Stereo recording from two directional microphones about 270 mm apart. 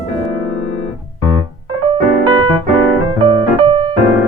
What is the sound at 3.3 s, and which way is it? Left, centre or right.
Music, centre.